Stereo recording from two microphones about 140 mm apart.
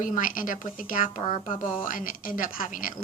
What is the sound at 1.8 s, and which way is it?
A woman's voice, 75° left (ahead or behind).